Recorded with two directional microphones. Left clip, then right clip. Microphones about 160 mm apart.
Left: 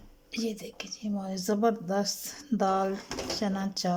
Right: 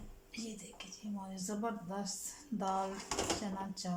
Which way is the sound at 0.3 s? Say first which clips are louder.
Left 13 dB; 75° left (ahead or behind).